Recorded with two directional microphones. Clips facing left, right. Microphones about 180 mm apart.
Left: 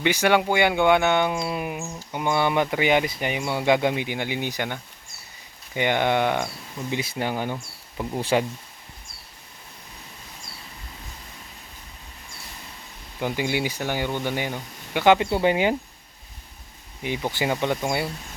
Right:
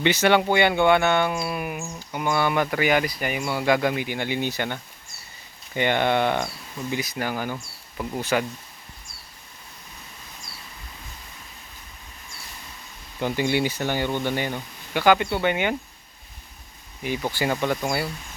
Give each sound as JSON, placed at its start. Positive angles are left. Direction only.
{"t": 0.0, "sound": "speech", "side_deg": 10}
{"t": 6.9, "sound": "speech", "side_deg": 25}
{"t": 8.2, "sound": "speech", "side_deg": 30}
{"t": 13.1, "sound": "speech", "side_deg": 10}
{"t": 15.0, "sound": "speech", "side_deg": 25}
{"t": 17.0, "sound": "speech", "side_deg": 20}